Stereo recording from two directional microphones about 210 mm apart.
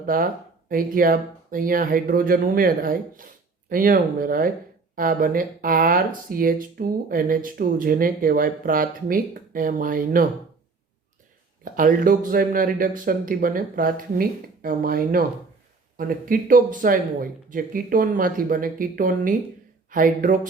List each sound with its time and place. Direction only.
0.0 s speech: 40° right (ahead or behind)
11.6 s speech: 40° right (ahead or behind)